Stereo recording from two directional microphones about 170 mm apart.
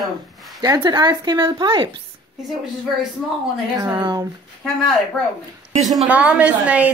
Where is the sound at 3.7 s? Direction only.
25° right (ahead or behind).